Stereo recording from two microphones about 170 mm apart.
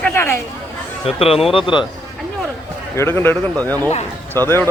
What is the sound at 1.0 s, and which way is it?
Speech, 35° left (ahead or behind).